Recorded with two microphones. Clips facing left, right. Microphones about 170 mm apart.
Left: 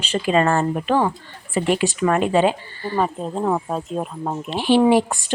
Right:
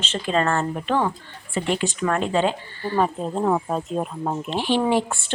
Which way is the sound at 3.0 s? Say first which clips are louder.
Even; centre (ahead or behind).